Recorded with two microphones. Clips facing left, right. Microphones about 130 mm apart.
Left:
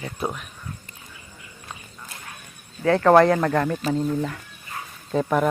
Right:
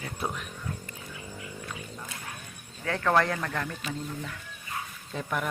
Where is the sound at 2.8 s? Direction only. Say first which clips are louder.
Left 10 dB; 40° left (ahead or behind).